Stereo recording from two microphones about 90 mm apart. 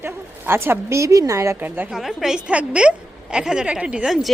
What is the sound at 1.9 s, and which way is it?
A woman's voice, 5° right (ahead or behind).